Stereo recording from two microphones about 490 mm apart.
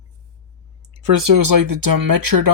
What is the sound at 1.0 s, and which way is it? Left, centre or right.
Speech, right.